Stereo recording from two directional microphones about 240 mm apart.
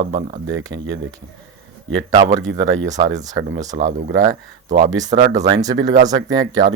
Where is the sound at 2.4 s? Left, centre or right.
Right.